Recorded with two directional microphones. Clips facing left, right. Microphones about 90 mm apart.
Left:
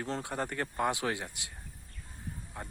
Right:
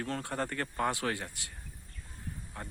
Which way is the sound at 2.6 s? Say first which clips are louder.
Even; 15° left (ahead or behind).